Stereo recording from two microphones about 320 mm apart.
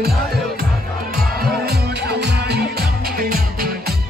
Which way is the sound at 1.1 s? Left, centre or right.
Right.